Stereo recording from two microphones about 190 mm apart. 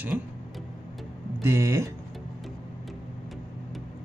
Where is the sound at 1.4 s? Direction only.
15° right (ahead or behind).